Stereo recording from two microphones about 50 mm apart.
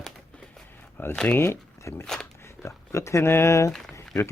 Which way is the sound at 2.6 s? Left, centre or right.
Left.